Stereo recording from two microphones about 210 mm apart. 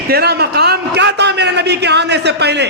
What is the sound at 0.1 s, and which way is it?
A man's voice, 50° right (ahead or behind).